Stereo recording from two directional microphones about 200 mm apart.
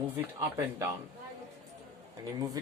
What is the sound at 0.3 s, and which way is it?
Speech, 10° right (ahead or behind).